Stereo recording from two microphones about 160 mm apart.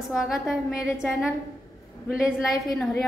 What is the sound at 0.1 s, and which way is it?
A woman's voice, centre (ahead or behind).